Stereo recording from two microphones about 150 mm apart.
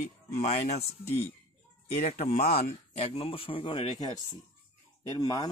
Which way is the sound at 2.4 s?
85° left.